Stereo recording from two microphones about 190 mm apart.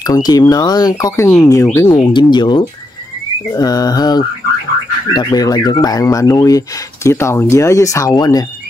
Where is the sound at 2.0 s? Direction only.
25° left (ahead or behind).